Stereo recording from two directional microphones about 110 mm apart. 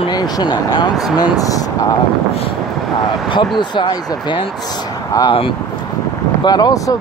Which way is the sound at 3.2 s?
45° left (ahead or behind).